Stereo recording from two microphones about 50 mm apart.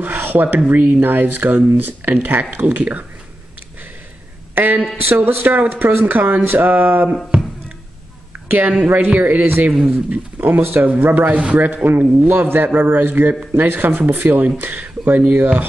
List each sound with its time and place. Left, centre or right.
0.0 s rub: right
0.7 s speech: right
4.6 s speech: right
8.5 s a man's voice: right